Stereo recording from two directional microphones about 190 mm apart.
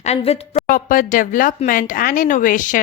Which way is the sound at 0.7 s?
45° left (ahead or behind).